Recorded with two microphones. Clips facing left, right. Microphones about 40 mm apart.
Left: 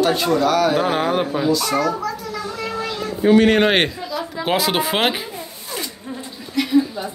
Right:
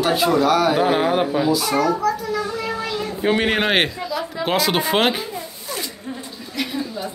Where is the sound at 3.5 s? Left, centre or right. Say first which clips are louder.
Left 3 dB; centre.